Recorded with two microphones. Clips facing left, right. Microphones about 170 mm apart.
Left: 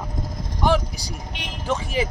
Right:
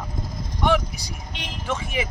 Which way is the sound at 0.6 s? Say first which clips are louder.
Left 1 dB; 35° left (ahead or behind).